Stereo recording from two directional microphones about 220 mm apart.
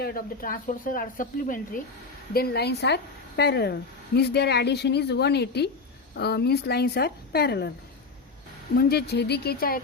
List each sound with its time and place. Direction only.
0.0 s a woman's voice: 40° left (ahead or behind)
8.7 s a woman's voice: 45° left (ahead or behind)